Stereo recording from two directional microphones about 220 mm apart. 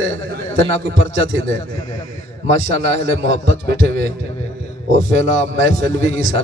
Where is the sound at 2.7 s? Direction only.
50° right (ahead or behind).